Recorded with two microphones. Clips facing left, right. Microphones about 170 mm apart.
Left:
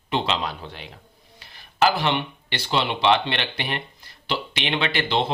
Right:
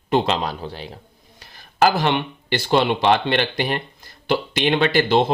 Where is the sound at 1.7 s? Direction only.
45° right (ahead or behind).